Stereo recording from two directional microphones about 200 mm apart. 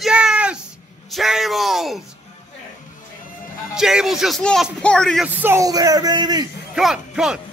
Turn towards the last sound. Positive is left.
turn(degrees=0)  # may be behind; listen again after turning